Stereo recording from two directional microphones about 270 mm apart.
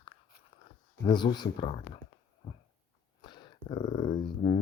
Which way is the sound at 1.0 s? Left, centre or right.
Centre.